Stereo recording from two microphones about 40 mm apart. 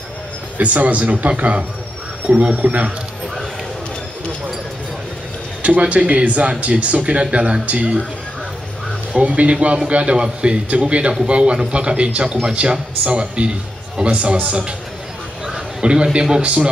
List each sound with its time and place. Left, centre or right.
0.6 s speech: right
2.2 s speech: right
5.6 s speech: right
9.1 s speech: right
15.4 s a man's voice: centre